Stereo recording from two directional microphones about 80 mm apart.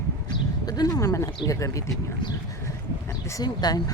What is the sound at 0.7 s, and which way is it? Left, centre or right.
Speech, left.